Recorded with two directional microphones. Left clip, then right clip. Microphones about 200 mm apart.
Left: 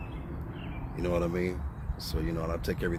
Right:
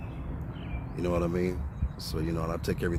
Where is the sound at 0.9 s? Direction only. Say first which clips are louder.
Right 1 dB; 15° right (ahead or behind).